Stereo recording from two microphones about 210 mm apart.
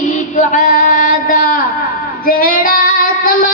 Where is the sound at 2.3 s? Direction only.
40° left (ahead or behind).